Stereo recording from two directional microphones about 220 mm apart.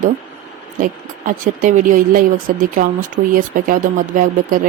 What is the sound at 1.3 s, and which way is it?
Speech, 35° right (ahead or behind).